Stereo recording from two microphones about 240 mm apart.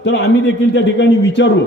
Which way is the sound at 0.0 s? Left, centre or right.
Left.